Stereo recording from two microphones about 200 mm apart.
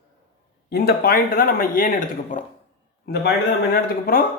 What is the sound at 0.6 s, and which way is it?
Speech, 50° left (ahead or behind).